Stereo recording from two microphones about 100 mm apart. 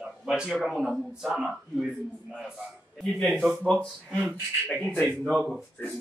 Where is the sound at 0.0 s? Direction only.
10° right (ahead or behind).